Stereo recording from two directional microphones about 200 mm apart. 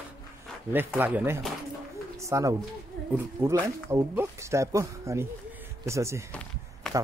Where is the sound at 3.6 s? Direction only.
15° right (ahead or behind).